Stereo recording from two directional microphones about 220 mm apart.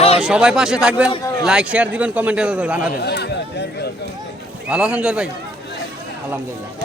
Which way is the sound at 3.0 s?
50° left (ahead or behind).